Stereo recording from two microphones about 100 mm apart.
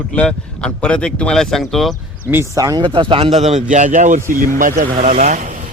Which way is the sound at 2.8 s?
55° right (ahead or behind).